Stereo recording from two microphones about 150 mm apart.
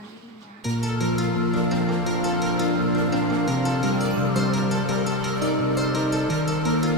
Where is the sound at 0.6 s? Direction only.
Centre (ahead or behind).